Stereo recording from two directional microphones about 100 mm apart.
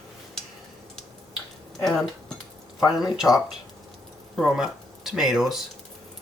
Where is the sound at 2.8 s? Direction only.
45° left (ahead or behind).